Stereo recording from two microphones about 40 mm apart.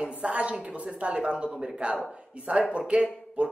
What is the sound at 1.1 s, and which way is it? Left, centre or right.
A woman's voice, right.